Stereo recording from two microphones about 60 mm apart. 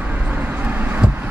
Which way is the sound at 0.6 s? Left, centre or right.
Right.